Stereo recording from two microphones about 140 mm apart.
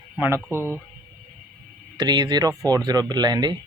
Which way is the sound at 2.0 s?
30° right (ahead or behind).